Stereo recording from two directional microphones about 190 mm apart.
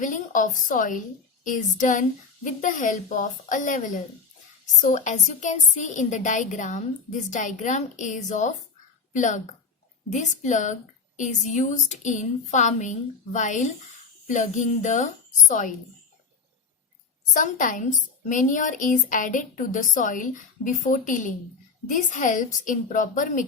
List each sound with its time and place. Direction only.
0.0 s a woman's voice: 45° left (ahead or behind)
17.3 s speech: 45° left (ahead or behind)